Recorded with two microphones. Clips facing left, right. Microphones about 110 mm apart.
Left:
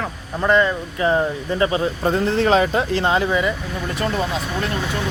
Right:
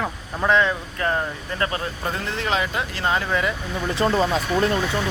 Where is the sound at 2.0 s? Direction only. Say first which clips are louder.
Left 9 dB; 35° left (ahead or behind).